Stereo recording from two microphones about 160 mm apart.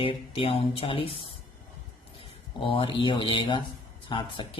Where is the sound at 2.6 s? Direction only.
35° left (ahead or behind).